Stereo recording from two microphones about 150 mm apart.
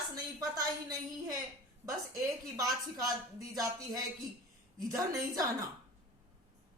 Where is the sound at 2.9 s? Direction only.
25° right (ahead or behind).